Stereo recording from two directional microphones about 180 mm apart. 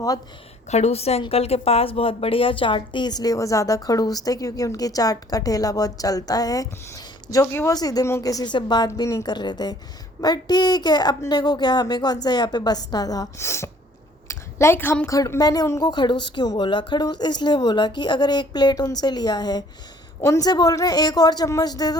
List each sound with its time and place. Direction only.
0.7 s a woman's voice: 35° left (ahead or behind); by 21.9 s 20° left (ahead or behind)